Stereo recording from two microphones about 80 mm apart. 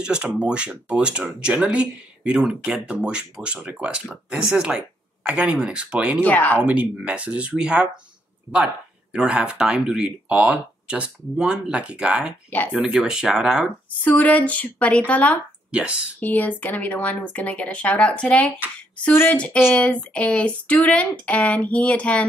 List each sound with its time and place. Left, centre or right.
0.0 s speech: centre
6.2 s speech: centre
6.6 s speech: centre
9.1 s speech: centre
14.0 s speech: centre